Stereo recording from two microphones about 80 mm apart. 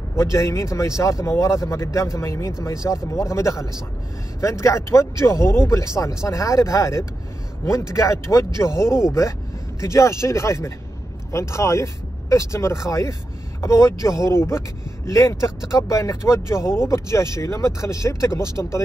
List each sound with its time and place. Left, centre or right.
0.1 s speech: left